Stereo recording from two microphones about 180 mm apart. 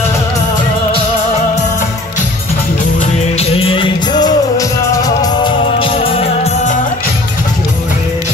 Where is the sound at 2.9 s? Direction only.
35° left (ahead or behind); by 5.3 s 20° left (ahead or behind).